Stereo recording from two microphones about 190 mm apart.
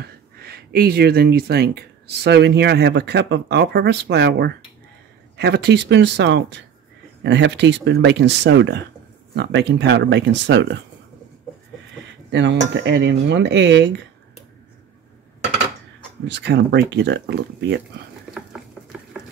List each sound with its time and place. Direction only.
0.0 s a sound: 55° right (ahead or behind)
2.2 s speech: 65° right (ahead or behind)
12.3 s speech: 70° right (ahead or behind)
16.3 s speech: 65° right (ahead or behind)
18.3 s stir: 5° right (ahead or behind)